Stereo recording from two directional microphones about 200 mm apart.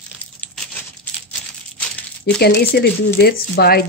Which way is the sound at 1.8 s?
5° left (ahead or behind).